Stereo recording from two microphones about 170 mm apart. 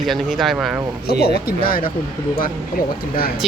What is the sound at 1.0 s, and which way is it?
Speech, 65° left (ahead or behind).